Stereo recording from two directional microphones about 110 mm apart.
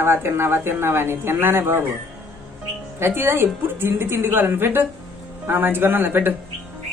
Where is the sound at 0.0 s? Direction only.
20° right (ahead or behind).